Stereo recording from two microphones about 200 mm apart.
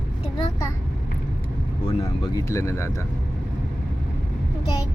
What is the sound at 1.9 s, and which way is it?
Speech, 20° left (ahead or behind).